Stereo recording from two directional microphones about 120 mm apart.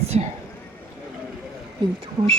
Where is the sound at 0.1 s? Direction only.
70° right (ahead or behind).